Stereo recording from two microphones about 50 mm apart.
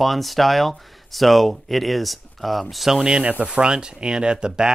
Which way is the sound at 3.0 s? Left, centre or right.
Centre.